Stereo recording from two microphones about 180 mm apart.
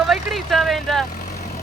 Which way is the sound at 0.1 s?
Centre (ahead or behind).